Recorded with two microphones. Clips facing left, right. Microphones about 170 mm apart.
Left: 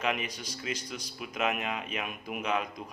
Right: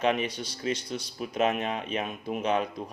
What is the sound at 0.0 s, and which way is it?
Speech, 30° right (ahead or behind).